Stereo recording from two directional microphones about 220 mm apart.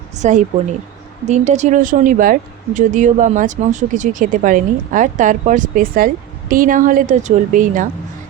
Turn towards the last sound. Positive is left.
turn(degrees=-35)  # may be behind; listen again after turning